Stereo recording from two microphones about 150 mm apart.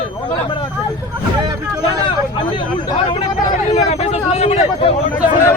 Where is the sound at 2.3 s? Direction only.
30° left (ahead or behind).